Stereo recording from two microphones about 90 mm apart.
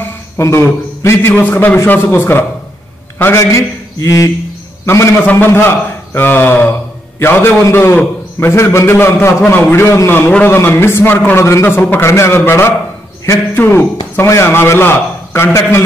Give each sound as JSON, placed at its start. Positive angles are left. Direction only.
{"t": 0.4, "sound": "a man's voice", "side_deg": 30}